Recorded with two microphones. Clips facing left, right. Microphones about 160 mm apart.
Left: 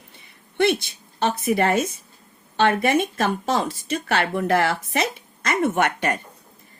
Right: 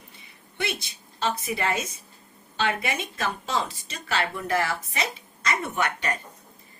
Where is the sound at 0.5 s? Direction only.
60° left (ahead or behind).